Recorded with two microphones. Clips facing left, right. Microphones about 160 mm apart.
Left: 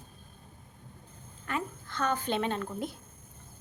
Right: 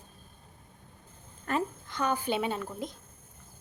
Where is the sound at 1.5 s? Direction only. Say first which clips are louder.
Right 4 dB; 40° right (ahead or behind).